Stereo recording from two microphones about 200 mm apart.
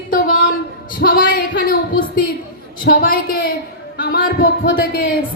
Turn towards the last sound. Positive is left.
turn(degrees=50)  # may be behind; listen again after turning